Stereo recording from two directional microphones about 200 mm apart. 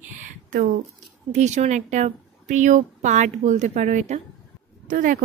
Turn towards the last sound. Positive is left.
turn(degrees=-40)  # may be behind; listen again after turning